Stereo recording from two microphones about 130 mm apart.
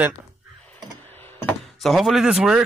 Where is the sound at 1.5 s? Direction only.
Centre (ahead or behind).